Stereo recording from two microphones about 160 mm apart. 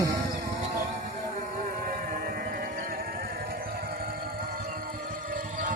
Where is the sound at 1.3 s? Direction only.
65° right (ahead or behind).